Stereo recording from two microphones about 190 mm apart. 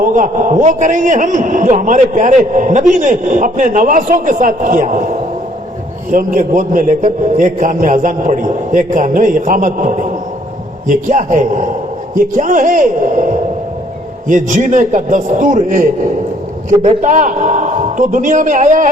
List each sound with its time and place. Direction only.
0.0 s a man's voice: 40° right (ahead or behind)
14.3 s a man's voice: 40° right (ahead or behind)